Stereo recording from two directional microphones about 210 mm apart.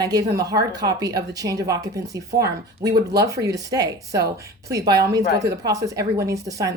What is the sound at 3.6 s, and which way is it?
Speech, 15° right (ahead or behind).